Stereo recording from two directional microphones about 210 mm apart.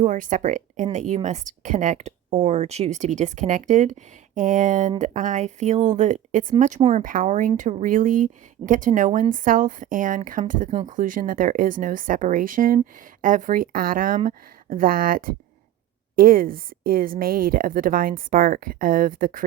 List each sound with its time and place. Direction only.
0.0 s a woman's voice: 40° right (ahead or behind)